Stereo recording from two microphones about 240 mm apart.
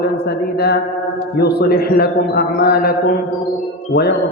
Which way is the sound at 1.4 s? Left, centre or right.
Left.